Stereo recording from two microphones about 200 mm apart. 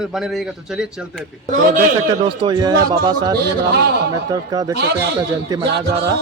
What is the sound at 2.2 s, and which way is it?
Speech, 25° right (ahead or behind).